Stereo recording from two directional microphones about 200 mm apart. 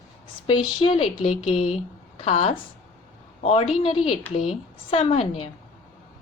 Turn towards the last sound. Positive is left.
turn(degrees=30)  # may be behind; listen again after turning